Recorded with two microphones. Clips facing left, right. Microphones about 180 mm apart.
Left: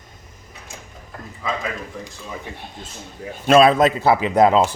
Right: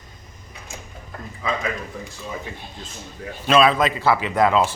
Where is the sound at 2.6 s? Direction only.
60° left (ahead or behind).